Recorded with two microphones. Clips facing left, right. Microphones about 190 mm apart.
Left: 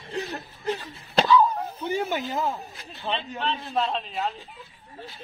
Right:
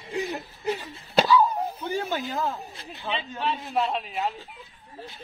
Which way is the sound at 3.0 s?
5° right (ahead or behind).